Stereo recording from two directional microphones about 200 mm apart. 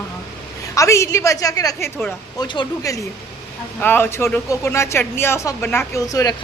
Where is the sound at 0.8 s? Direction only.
15° left (ahead or behind).